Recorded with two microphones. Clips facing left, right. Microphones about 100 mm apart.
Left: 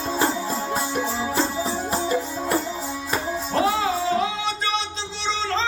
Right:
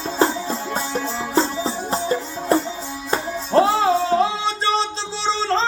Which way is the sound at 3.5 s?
35° right (ahead or behind).